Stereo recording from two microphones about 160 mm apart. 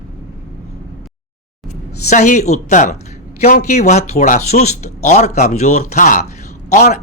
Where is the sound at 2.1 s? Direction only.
50° left (ahead or behind).